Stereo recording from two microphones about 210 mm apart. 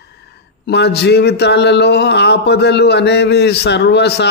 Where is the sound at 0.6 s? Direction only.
50° left (ahead or behind).